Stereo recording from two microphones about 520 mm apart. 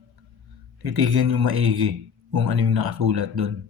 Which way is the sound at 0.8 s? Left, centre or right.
Right.